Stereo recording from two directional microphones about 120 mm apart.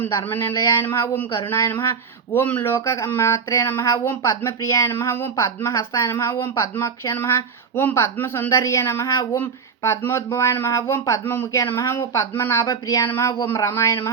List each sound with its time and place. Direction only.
0.0 s speech: 20° left (ahead or behind)